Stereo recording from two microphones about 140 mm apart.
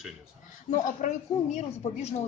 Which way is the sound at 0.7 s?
60° left (ahead or behind).